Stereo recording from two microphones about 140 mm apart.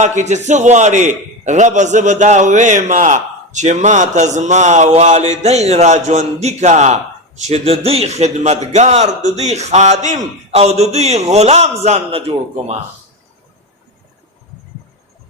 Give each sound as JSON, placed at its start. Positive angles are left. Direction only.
{"t": 0.2, "sound": "a man's voice", "side_deg": -55}